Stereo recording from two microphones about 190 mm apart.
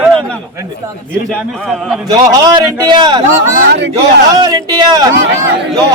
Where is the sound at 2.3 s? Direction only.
20° right (ahead or behind).